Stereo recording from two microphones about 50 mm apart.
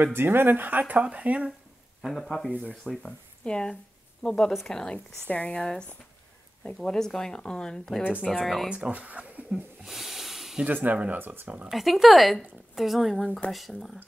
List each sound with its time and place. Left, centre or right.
0.1 s speech: right
2.2 s speech: centre
5.3 s speech: left; by 8.6 s centre
8.6 s speech: centre
9.5 s a sound: centre
10.7 s speech: right
11.4 s speech: right
11.7 s speech: centre